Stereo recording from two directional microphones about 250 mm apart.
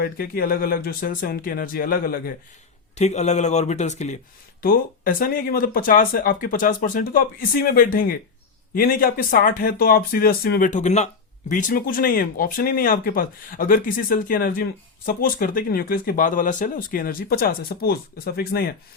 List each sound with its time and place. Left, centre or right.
0.0 s a man's voice: left